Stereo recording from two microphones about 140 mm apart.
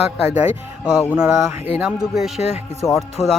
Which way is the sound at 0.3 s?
10° right (ahead or behind).